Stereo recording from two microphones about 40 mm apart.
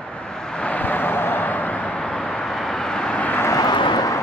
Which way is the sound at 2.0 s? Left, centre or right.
Centre.